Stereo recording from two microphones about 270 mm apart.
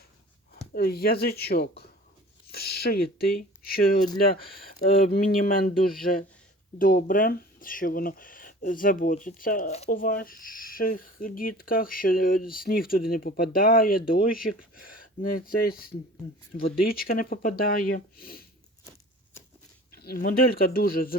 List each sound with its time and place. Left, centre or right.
0.7 s speech: left
20.0 s speech: left